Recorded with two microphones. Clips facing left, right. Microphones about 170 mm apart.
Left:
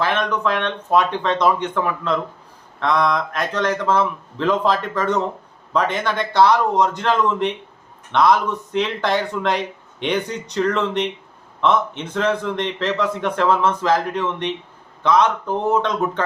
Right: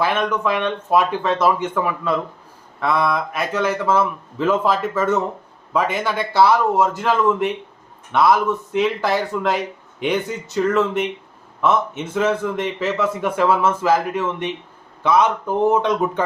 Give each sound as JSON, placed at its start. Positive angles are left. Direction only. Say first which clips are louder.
{"t": 0.0, "sound": "a man's voice", "louder": "right 1 dB", "side_deg": -10}